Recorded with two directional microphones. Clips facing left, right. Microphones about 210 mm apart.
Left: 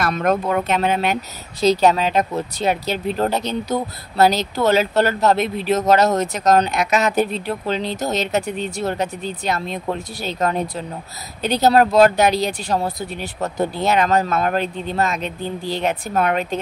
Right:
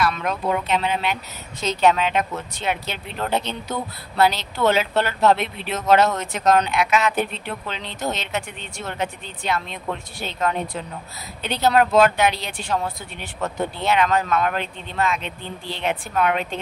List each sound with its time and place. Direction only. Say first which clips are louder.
0.0 s speech: left 4 dB; 45° left (ahead or behind)
1.6 s speech: left 4 dB; 35° left (ahead or behind)